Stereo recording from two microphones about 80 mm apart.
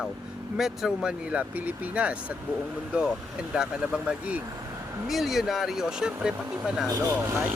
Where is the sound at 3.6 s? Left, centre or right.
Centre.